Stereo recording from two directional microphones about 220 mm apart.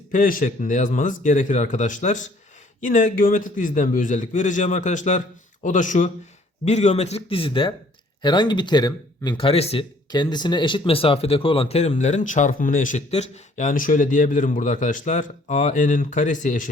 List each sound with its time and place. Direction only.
0.1 s speech: 40° left (ahead or behind)